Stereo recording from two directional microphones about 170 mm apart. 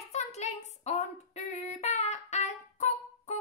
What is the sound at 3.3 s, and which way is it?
Music, 40° left (ahead or behind).